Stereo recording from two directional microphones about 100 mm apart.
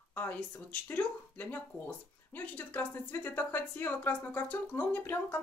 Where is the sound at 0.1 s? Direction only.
20° left (ahead or behind).